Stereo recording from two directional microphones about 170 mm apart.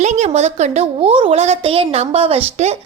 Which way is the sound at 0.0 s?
40° right (ahead or behind).